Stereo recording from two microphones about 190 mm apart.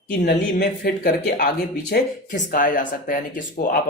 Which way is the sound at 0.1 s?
55° left (ahead or behind).